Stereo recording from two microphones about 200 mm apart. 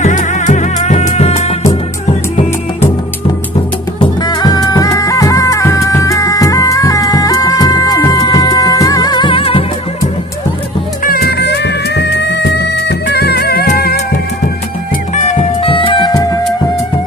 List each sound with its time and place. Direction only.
0.0 s music: 40° left (ahead or behind)
4.2 s music: 20° left (ahead or behind)
11.0 s music: 50° left (ahead or behind)
15.1 s music: 30° left (ahead or behind)